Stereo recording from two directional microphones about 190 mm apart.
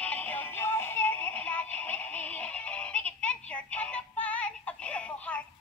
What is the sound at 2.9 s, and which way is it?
Music, 5° left (ahead or behind).